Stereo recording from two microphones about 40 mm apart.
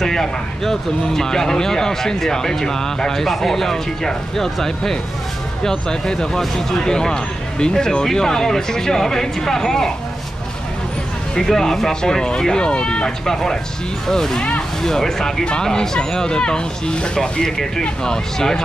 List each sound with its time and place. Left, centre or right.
0.0 s speech: centre
11.3 s speech: centre
13.2 s speech: centre